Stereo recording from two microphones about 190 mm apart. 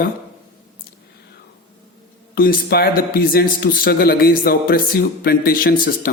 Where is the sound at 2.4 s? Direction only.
50° left (ahead or behind).